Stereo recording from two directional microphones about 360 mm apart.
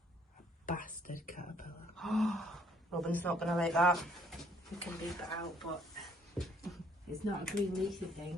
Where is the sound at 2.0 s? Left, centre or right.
Centre.